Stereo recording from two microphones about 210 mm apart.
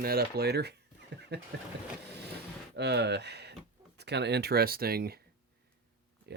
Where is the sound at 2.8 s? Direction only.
55° right (ahead or behind).